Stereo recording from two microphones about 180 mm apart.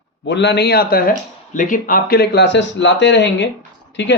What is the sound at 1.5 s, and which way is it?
A man's voice, 45° left (ahead or behind).